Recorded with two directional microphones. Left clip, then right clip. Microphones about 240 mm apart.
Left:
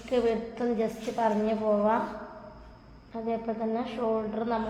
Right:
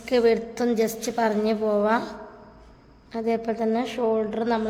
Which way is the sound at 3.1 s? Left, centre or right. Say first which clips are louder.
Right 6 dB; right.